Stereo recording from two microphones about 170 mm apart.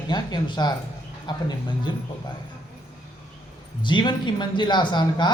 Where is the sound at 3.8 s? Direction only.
25° left (ahead or behind).